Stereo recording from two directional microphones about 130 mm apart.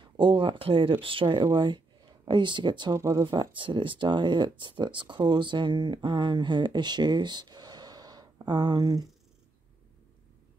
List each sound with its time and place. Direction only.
0.0 s speech: 40° right (ahead or behind)